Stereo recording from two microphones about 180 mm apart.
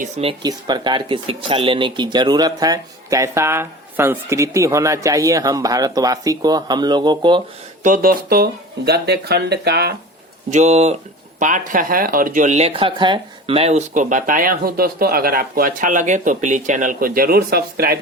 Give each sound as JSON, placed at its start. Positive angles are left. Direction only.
{"t": 0.0, "sound": "speech", "side_deg": -30}
{"t": 7.9, "sound": "speech", "side_deg": -50}
{"t": 10.5, "sound": "speech", "side_deg": -40}